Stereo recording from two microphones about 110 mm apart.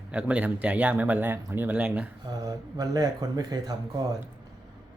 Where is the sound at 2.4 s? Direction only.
35° right (ahead or behind).